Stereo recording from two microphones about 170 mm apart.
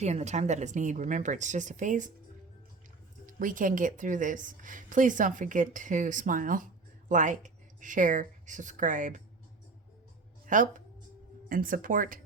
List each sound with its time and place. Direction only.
0.0 s a woman's voice: 40° right (ahead or behind)
3.2 s a woman's voice: 50° right (ahead or behind)
10.4 s speech: 50° right (ahead or behind)